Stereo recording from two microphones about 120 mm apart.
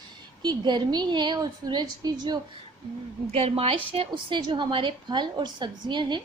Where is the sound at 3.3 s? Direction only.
60° right (ahead or behind).